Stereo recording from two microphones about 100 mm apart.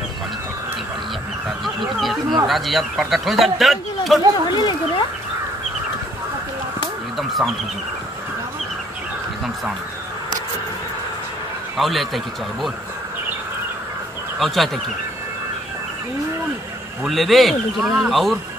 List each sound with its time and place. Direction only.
1.6 s a sound: centre (ahead or behind)
2.4 s a man's voice: centre (ahead or behind)
4.5 s speech: 50° left (ahead or behind)
7.2 s a man's voice: centre (ahead or behind)
11.7 s a man's voice: centre (ahead or behind)
14.4 s a man's voice: centre (ahead or behind)
17.0 s a man's voice: centre (ahead or behind)